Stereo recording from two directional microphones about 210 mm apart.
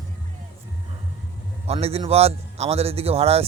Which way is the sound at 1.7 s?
30° right (ahead or behind).